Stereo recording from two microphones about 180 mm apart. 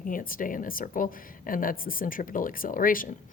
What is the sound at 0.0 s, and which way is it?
A woman's voice, 50° left (ahead or behind).